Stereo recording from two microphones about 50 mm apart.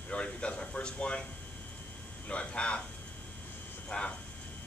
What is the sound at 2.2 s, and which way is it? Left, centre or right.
Speech, left.